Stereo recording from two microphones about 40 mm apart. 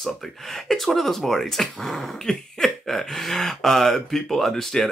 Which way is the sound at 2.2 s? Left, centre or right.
Centre.